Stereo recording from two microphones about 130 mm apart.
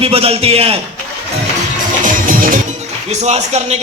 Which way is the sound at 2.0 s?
90° right.